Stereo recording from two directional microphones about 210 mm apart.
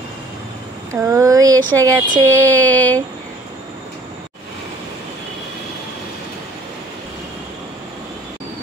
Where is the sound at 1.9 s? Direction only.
20° right (ahead or behind).